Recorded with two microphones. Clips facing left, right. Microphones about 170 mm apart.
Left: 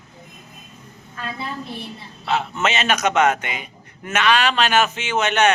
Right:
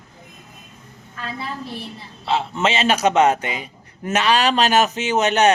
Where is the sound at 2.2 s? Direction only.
30° right (ahead or behind).